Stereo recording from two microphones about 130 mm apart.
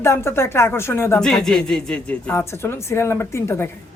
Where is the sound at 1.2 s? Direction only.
5° left (ahead or behind).